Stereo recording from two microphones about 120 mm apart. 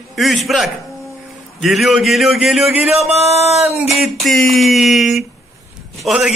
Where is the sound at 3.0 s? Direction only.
60° right (ahead or behind).